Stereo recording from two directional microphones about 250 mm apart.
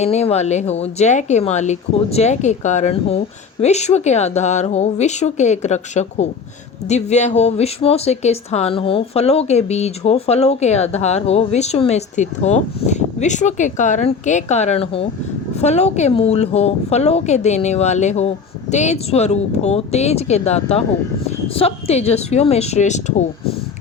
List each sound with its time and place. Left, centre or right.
0.0 s speech: left